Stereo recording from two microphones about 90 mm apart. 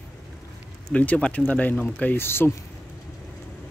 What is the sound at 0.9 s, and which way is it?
Speech, 15° left (ahead or behind).